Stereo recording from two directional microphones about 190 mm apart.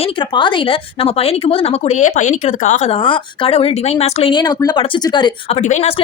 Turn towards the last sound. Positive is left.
turn(degrees=35)  # may be behind; listen again after turning